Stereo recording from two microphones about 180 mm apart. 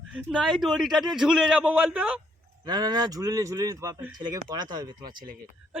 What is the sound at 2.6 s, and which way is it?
Speech, 20° right (ahead or behind).